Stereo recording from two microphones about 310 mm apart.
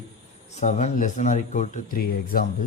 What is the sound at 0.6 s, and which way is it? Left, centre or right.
Speech, left.